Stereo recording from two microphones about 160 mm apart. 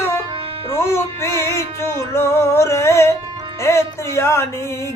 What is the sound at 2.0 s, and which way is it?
Music, 15° left (ahead or behind).